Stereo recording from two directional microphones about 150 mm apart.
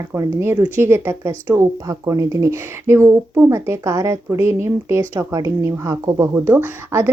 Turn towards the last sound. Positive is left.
turn(degrees=-15)  # may be behind; listen again after turning